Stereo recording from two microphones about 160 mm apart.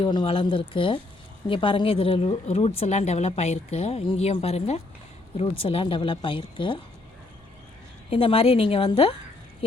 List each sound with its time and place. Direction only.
0.0 s speech: 30° left (ahead or behind)
8.1 s speech: 35° left (ahead or behind)